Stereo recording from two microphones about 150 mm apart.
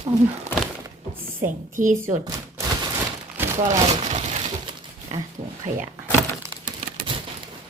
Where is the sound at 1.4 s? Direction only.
60° right (ahead or behind).